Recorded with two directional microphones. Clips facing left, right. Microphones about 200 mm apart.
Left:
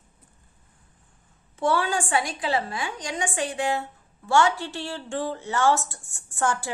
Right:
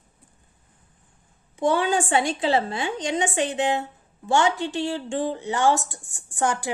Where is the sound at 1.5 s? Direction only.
20° right (ahead or behind).